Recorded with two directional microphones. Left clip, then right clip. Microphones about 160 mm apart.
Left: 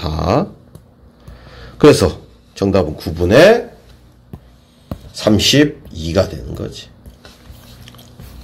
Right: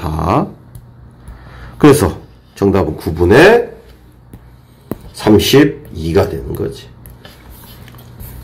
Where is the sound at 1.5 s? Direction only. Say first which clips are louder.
Even; 25° left (ahead or behind).